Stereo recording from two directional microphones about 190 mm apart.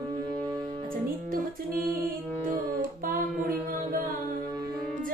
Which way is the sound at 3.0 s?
50° right (ahead or behind).